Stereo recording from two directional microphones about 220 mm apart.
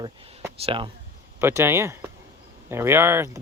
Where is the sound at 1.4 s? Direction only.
10° right (ahead or behind).